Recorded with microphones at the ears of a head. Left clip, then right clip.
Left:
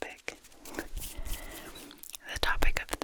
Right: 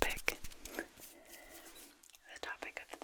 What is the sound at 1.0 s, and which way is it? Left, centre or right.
Whispering, left.